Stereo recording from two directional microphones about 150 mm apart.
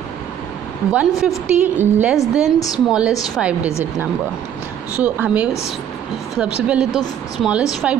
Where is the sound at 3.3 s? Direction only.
5° right (ahead or behind).